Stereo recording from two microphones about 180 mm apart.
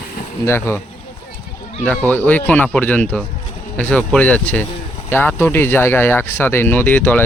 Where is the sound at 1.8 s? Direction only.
10° left (ahead or behind).